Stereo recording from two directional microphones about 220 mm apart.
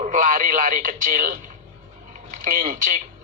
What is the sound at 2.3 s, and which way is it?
Speech, 40° right (ahead or behind).